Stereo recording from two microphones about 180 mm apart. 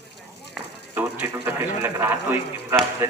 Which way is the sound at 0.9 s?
15° right (ahead or behind).